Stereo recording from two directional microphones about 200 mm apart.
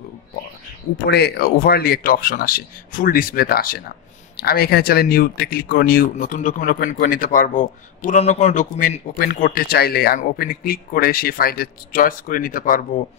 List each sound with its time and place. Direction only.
0.9 s speech: 55° left (ahead or behind)